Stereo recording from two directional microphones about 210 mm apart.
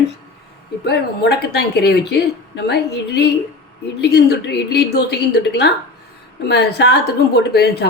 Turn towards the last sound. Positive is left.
turn(degrees=50)  # may be behind; listen again after turning